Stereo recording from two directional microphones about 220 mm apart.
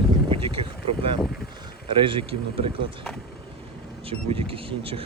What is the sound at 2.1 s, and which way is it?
Speech, 25° right (ahead or behind).